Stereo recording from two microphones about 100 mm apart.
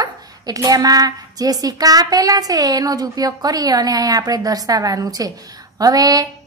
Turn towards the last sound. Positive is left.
turn(degrees=-40)  # may be behind; listen again after turning